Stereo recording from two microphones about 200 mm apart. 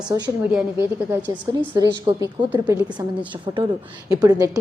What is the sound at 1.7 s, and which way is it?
A woman's voice, 20° right (ahead or behind).